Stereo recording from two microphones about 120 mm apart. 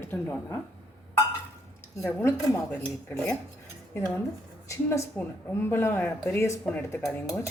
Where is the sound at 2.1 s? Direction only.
15° left (ahead or behind).